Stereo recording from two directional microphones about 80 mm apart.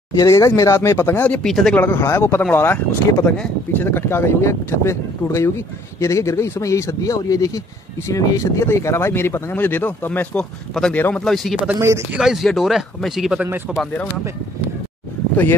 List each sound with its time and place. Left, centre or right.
0.2 s speech: left
1.4 s speech: centre
1.8 s speech: left
10.7 s speech: centre
11.0 s speech: left
11.2 s speech: centre